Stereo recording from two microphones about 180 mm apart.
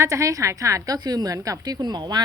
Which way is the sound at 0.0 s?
15° right (ahead or behind).